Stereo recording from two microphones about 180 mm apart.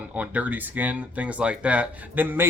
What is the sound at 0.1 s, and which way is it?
Speech, 10° right (ahead or behind).